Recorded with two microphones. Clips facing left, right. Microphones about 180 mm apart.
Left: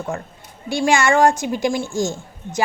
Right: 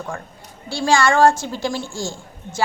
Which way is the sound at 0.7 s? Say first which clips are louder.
Left 1 dB; 20° left (ahead or behind).